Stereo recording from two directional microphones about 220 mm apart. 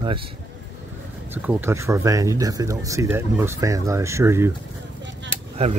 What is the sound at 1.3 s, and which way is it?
Speech, 10° right (ahead or behind).